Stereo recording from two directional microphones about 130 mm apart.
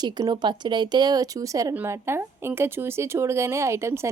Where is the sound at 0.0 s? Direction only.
35° right (ahead or behind).